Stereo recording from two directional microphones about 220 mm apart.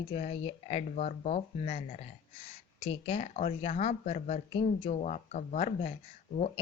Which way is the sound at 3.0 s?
30° left (ahead or behind).